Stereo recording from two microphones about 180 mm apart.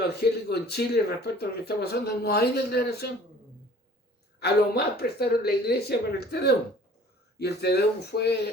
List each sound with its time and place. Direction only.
0.1 s speech: 65° left (ahead or behind)
4.4 s speech: 65° left (ahead or behind)